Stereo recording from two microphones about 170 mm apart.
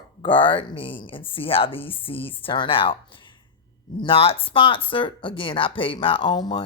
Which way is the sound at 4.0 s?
30° left (ahead or behind).